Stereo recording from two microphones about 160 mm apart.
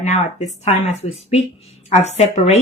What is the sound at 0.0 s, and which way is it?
Speech, 50° left (ahead or behind).